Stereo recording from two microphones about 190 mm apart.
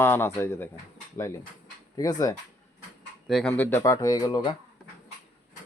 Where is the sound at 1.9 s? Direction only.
20° left (ahead or behind).